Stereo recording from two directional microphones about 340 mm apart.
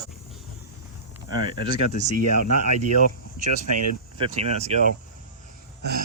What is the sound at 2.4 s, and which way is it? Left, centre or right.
Speech, right.